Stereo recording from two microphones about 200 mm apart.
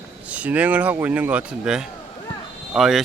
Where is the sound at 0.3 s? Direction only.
5° right (ahead or behind).